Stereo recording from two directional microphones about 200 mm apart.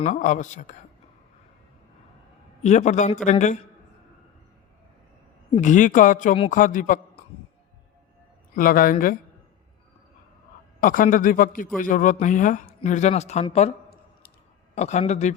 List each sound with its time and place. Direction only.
0.0 s speech: 40° left (ahead or behind)
2.6 s speech: 35° left (ahead or behind)
5.5 s speech: 40° left (ahead or behind)
8.5 s a man's voice: 45° left (ahead or behind)
10.8 s a man's voice: 45° left (ahead or behind)
14.8 s speech: 35° left (ahead or behind)